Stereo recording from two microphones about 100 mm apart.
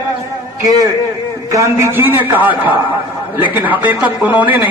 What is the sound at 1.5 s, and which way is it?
A man's voice, 25° right (ahead or behind).